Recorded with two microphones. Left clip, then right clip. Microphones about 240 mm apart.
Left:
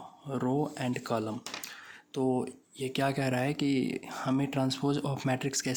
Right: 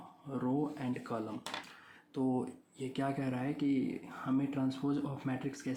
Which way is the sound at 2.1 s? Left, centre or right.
Left.